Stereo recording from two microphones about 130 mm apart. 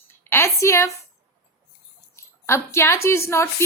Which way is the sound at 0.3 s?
20° left (ahead or behind).